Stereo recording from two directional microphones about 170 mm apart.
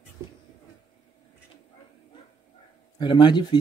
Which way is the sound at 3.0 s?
25° left (ahead or behind).